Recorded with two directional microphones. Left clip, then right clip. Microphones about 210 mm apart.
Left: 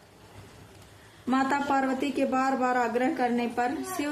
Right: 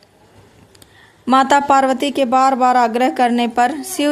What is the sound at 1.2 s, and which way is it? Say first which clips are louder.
Speech: right 14 dB; 50° right (ahead or behind).